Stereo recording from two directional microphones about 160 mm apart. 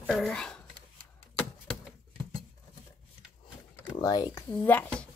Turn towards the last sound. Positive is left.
turn(degrees=10)  # may be behind; listen again after turning